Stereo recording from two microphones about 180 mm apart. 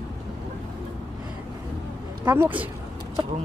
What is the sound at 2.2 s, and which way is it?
Speech, 10° right (ahead or behind).